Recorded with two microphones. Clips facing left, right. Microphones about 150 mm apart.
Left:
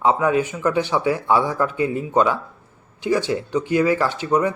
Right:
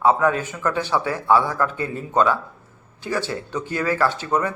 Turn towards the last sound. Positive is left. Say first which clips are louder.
# left 2 dB
turn(degrees=15)  # may be behind; listen again after turning